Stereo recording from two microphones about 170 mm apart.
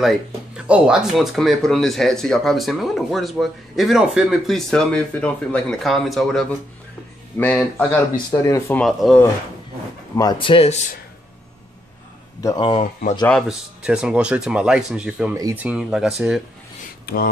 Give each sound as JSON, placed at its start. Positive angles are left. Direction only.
{"t": 0.0, "sound": "speech", "side_deg": -5}
{"t": 7.5, "sound": "speech", "side_deg": 5}
{"t": 8.8, "sound": "speech", "side_deg": 0}
{"t": 10.1, "sound": "speech", "side_deg": 25}
{"t": 12.4, "sound": "a man's voice", "side_deg": 25}
{"t": 13.2, "sound": "speech", "side_deg": 0}
{"t": 17.0, "sound": "speech", "side_deg": 65}